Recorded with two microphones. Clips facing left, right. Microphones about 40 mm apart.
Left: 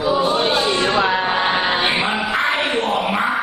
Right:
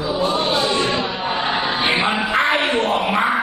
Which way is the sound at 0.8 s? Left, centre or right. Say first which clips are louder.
Left 4 dB; left.